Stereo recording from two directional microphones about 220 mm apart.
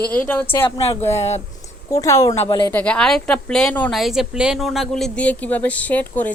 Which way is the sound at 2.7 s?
5° left (ahead or behind).